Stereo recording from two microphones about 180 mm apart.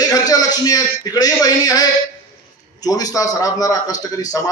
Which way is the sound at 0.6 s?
20° left (ahead or behind).